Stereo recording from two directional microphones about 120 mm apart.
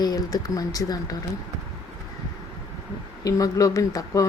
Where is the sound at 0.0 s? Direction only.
30° left (ahead or behind).